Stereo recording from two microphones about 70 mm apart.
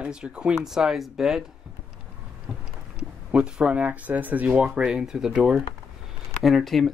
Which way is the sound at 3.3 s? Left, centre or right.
Centre.